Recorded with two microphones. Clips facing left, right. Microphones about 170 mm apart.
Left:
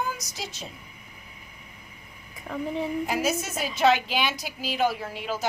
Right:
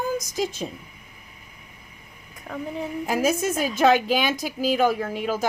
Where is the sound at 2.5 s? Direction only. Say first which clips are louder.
Left 1 dB; centre (ahead or behind).